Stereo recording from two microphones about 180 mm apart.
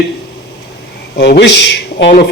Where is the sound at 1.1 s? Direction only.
65° left (ahead or behind).